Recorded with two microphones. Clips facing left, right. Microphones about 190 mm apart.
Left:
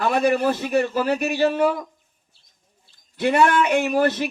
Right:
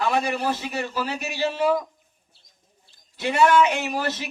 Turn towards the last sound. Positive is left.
turn(degrees=55)  # may be behind; listen again after turning